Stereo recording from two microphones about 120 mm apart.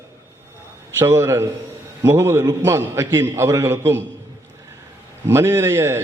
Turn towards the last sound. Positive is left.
turn(degrees=-25)  # may be behind; listen again after turning